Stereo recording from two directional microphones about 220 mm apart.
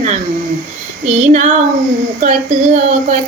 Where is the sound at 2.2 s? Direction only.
35° right (ahead or behind).